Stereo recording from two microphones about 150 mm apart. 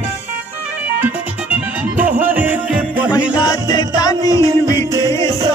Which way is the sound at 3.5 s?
25° left (ahead or behind).